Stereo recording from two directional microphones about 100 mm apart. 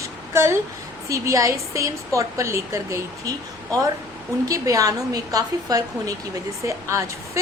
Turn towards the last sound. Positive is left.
turn(degrees=-30)  # may be behind; listen again after turning